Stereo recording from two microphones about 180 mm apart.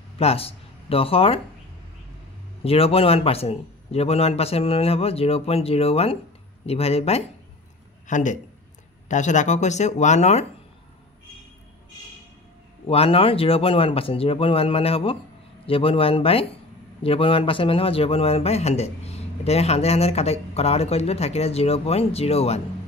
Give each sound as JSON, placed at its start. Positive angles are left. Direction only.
{"t": 0.2, "sound": "speech", "side_deg": 35}
{"t": 2.6, "sound": "a man's voice", "side_deg": 35}
{"t": 12.8, "sound": "speech", "side_deg": 30}